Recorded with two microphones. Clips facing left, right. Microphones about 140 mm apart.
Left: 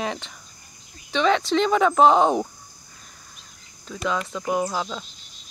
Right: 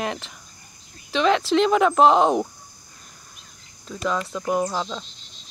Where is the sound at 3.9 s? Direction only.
Centre (ahead or behind).